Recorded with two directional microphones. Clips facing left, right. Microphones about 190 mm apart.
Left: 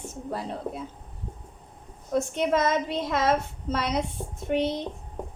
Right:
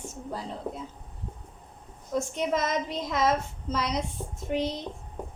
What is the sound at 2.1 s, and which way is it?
A woman's voice, 65° left (ahead or behind).